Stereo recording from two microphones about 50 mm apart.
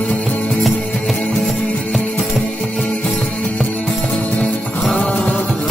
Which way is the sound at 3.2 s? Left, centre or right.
Centre.